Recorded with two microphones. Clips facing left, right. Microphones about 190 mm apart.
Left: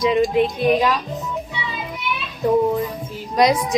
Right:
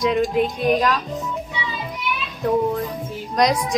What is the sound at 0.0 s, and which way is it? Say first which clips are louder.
A woman's voice: left 2 dB; centre (ahead or behind).